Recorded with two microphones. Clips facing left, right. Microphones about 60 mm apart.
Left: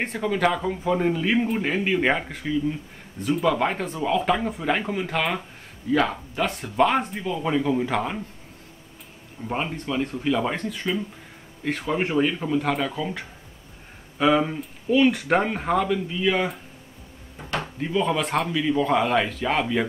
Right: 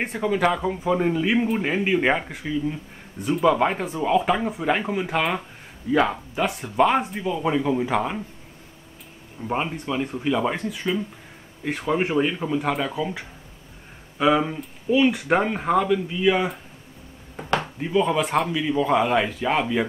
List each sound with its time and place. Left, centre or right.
0.0 s speech: centre
9.5 s speech: centre
17.7 s speech: centre